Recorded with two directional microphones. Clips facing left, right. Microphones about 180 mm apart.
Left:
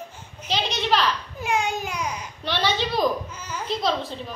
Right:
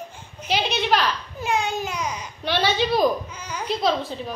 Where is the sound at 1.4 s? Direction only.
10° left (ahead or behind).